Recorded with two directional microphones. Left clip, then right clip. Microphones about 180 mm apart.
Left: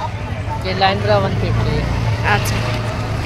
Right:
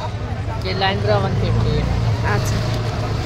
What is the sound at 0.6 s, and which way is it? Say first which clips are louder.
Speech: left 4 dB; 45° left (ahead or behind).